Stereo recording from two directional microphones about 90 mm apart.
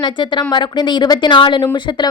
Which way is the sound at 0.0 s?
60° left (ahead or behind).